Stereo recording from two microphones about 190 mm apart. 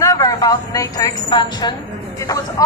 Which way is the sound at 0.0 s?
20° left (ahead or behind).